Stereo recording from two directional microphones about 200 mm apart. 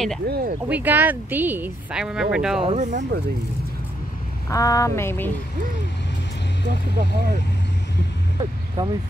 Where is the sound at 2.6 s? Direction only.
35° right (ahead or behind).